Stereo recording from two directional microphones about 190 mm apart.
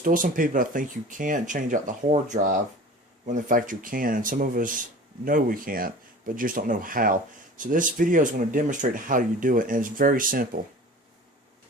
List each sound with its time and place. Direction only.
0.0 s speech: 45° right (ahead or behind)